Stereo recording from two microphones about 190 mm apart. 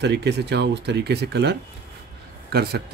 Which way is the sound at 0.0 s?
60° right (ahead or behind).